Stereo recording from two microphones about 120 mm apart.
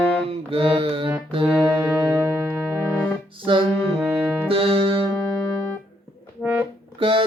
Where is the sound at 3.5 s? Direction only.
50° right (ahead or behind).